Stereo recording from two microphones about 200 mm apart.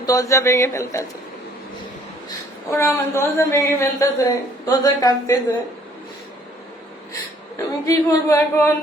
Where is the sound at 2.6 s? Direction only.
15° left (ahead or behind).